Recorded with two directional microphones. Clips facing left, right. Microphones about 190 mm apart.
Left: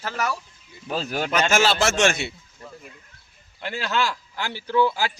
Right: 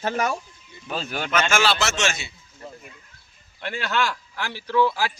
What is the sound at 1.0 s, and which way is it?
A man's voice, 35° left (ahead or behind).